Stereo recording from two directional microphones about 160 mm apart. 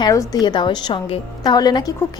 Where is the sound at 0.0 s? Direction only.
25° left (ahead or behind).